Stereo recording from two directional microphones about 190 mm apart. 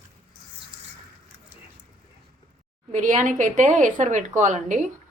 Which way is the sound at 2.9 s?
40° right (ahead or behind).